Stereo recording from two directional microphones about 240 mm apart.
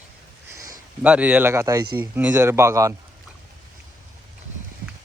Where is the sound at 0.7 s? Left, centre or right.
Centre.